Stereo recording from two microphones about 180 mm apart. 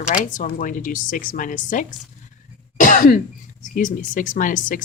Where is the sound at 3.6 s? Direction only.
45° left (ahead or behind).